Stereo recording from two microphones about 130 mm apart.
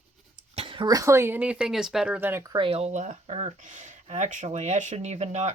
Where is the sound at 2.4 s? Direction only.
30° right (ahead or behind).